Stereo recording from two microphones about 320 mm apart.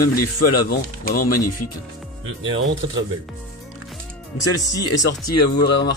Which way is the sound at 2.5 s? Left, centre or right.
Right.